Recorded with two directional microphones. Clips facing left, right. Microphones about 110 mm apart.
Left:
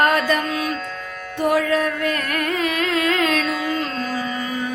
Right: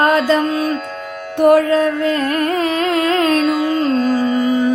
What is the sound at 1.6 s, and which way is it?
Carnatic music, 25° right (ahead or behind).